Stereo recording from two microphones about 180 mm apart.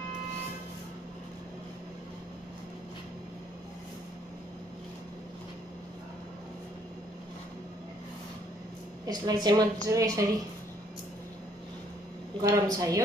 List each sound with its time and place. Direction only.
9.0 s a woman's voice: 20° right (ahead or behind)
12.4 s a woman's voice: 20° right (ahead or behind)